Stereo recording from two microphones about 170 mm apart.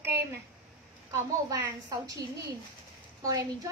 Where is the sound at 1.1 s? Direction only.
20° right (ahead or behind).